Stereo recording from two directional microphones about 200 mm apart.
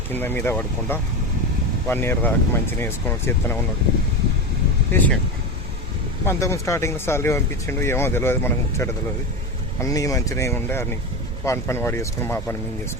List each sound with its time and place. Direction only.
0.1 s speech: 10° left (ahead or behind)
4.9 s speech: 10° left (ahead or behind)
6.2 s speech: 15° left (ahead or behind)